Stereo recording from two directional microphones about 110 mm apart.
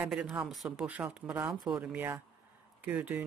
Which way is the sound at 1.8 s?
15° right (ahead or behind).